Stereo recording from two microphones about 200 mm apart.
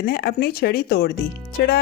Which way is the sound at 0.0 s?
50° left (ahead or behind).